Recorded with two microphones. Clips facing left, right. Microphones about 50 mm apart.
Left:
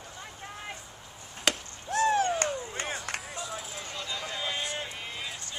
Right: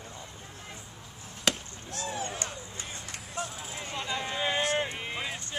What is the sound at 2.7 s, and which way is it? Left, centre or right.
Run, left.